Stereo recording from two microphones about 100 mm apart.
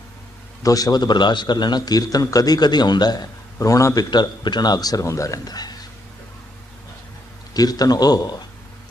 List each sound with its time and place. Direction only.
0.6 s a man's voice: 35° left (ahead or behind)
4.1 s a man's voice: 45° left (ahead or behind)
7.5 s a man's voice: 40° left (ahead or behind)